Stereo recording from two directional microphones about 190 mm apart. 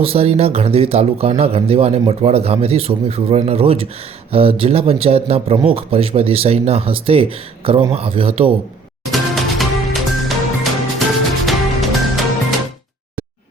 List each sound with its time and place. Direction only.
0.0 s speech: 30° right (ahead or behind)
9.1 s music: centre (ahead or behind)